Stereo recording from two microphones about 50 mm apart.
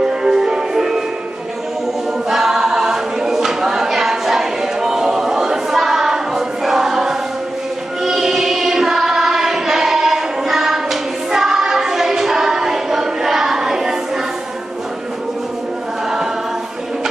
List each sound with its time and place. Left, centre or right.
0.0 s music: centre
2.2 s a capella: centre
8.0 s choir: centre